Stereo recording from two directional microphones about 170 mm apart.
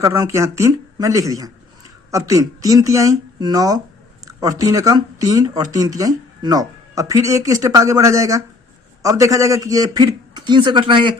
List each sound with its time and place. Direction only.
0.0 s speech: 20° right (ahead or behind)